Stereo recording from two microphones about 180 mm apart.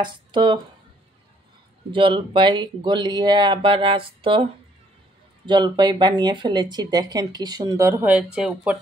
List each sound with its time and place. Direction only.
0.0 s speech: 25° right (ahead or behind)
1.9 s speech: 30° right (ahead or behind)
5.5 s speech: 25° right (ahead or behind); by 8.7 s 5° right (ahead or behind)